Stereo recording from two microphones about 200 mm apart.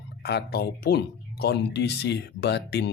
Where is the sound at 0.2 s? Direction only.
55° left (ahead or behind).